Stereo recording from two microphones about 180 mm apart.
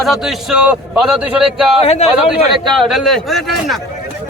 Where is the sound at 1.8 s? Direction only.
35° left (ahead or behind).